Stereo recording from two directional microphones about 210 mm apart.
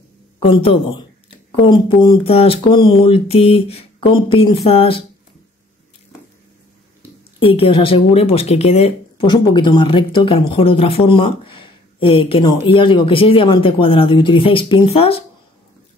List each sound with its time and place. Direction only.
0.4 s speech: 25° left (ahead or behind)
7.3 s speech: 25° left (ahead or behind)